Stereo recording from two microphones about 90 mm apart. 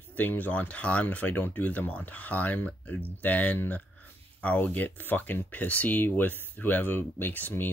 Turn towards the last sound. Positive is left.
turn(degrees=20)  # may be behind; listen again after turning